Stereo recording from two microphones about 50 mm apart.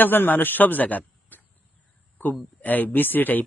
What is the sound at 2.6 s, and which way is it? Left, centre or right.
Speech, left.